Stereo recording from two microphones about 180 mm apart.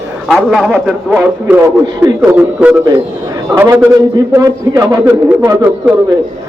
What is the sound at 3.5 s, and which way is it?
A man's voice, 15° right (ahead or behind).